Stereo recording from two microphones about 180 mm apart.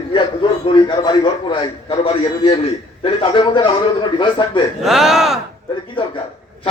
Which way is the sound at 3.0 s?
30° left (ahead or behind).